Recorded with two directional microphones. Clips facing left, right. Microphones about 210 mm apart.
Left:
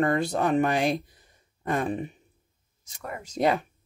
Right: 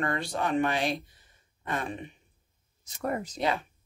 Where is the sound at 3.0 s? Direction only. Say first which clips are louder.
Right 7 dB; 40° right (ahead or behind).